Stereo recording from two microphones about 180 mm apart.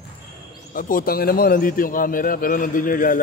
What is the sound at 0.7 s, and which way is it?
A man's voice, 50° left (ahead or behind).